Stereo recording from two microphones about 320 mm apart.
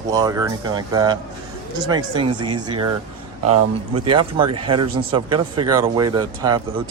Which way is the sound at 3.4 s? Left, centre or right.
Centre.